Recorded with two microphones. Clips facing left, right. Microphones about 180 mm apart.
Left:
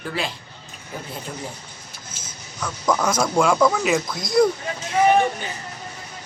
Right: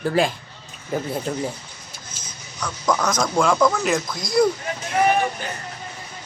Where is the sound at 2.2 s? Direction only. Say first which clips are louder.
Even; 5° left (ahead or behind).